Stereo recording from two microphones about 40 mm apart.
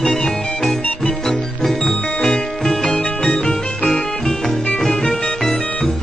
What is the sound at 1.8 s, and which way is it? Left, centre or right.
Music, left.